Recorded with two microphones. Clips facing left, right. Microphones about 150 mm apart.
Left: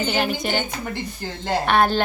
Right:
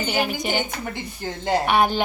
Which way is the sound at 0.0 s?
10° right (ahead or behind).